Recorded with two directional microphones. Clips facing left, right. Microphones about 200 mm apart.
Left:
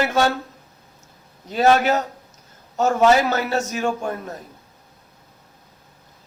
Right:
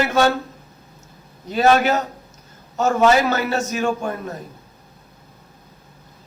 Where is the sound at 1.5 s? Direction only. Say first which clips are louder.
Right 1 dB; 35° left (ahead or behind).